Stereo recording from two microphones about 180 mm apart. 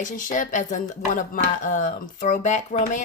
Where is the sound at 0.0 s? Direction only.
45° left (ahead or behind).